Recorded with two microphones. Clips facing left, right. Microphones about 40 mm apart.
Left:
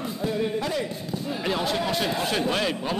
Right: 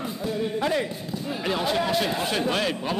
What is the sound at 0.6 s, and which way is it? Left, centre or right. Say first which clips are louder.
Speech: right 3 dB; right.